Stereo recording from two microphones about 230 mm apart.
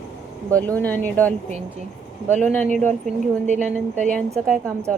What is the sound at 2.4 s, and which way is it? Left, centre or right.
Speech, centre.